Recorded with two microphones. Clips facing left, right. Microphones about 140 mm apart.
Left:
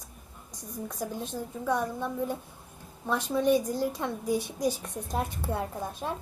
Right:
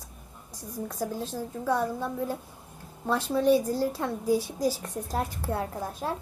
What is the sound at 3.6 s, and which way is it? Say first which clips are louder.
A child's voice: right 2 dB; 15° left (ahead or behind).